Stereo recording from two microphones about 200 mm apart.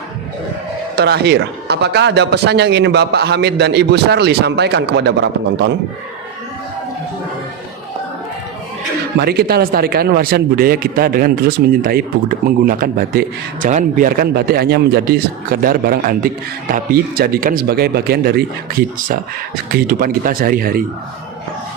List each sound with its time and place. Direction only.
0.9 s a man's voice: 55° right (ahead or behind)
9.1 s speech: 55° right (ahead or behind)